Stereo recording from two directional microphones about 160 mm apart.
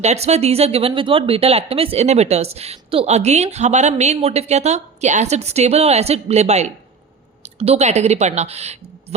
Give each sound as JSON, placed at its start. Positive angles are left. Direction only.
{"t": 0.0, "sound": "a woman's voice", "side_deg": -45}